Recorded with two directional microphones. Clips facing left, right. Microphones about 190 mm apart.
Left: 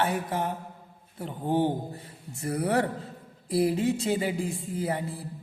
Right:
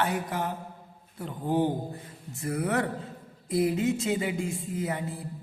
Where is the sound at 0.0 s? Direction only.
25° left (ahead or behind).